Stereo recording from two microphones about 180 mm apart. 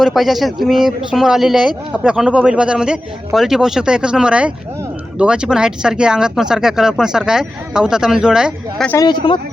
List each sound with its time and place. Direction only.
0.0 s speech: centre (ahead or behind)
8.9 s speech: 20° left (ahead or behind)